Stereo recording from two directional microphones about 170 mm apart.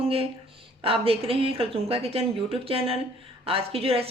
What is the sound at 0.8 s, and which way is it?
Speech, 35° right (ahead or behind).